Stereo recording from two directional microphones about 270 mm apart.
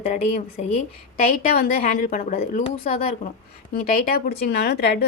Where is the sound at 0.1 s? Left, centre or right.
Left.